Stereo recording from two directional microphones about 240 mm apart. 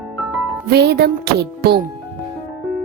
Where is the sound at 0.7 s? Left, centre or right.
Right.